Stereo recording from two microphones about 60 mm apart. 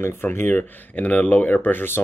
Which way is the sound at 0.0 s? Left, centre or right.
Left.